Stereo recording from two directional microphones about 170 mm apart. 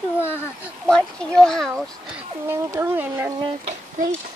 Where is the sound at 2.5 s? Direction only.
15° right (ahead or behind).